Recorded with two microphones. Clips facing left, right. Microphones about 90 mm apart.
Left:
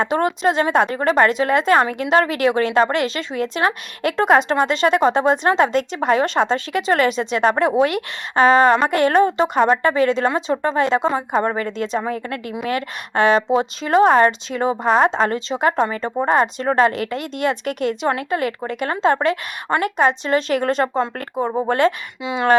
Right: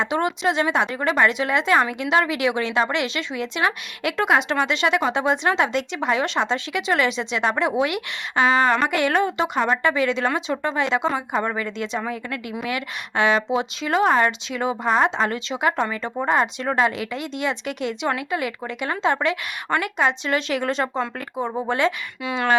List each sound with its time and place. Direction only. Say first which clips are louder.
0.0 s a woman's voice: left 4 dB; 45° left (ahead or behind)
22.2 s speech: left 3 dB; 20° left (ahead or behind)